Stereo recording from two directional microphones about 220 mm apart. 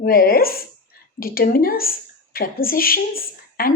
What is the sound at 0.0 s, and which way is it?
A woman's voice, 40° left (ahead or behind).